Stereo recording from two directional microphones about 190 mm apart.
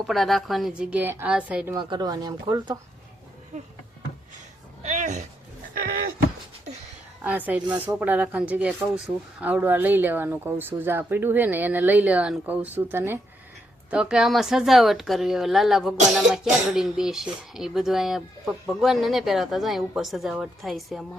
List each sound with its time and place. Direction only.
0.0 s speech: centre (ahead or behind)
1.7 s speech: 20° right (ahead or behind)
3.5 s a sound: 35° right (ahead or behind)
4.8 s a sound: 40° right (ahead or behind)
5.7 s speech: 50° right (ahead or behind)
7.3 s speech: 10° right (ahead or behind)